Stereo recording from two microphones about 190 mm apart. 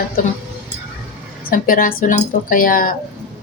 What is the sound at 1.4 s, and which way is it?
A woman's voice, 45° left (ahead or behind).